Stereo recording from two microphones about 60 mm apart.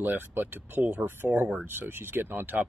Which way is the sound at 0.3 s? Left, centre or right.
Right.